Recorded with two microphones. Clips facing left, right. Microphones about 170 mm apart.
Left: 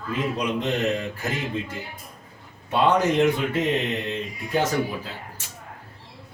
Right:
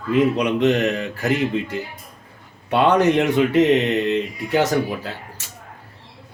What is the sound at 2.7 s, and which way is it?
Speech, 70° right (ahead or behind).